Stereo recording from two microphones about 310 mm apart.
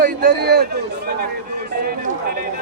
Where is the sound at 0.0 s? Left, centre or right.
Right.